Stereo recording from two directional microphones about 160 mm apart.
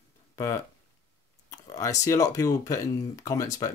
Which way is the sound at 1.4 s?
20° left (ahead or behind).